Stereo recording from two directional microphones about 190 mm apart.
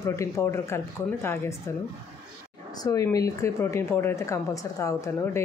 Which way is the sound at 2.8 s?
20° left (ahead or behind).